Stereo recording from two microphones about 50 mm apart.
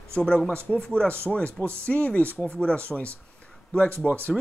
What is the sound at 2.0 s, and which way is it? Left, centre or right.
Speech, left.